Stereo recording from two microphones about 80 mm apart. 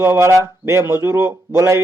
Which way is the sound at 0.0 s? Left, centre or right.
Right.